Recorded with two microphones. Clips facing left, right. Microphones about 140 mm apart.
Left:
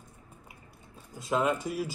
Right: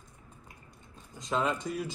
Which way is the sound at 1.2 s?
5° left (ahead or behind).